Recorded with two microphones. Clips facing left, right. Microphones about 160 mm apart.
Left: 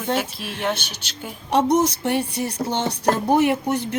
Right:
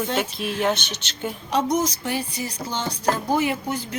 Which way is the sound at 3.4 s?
70° left (ahead or behind).